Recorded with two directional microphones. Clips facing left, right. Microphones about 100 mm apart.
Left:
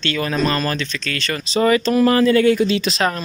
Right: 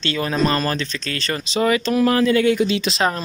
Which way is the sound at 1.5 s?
10° right (ahead or behind).